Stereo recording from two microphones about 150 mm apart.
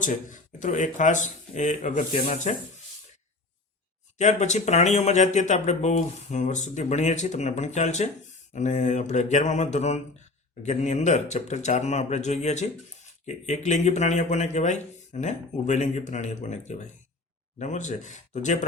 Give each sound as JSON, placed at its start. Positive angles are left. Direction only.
{"t": 0.0, "sound": "speech", "side_deg": 60}
{"t": 4.2, "sound": "speech", "side_deg": 50}